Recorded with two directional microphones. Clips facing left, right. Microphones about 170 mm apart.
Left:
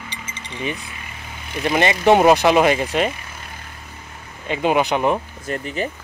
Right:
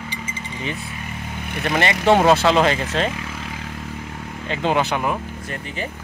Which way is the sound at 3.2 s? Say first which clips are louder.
Right 7 dB; 90° right.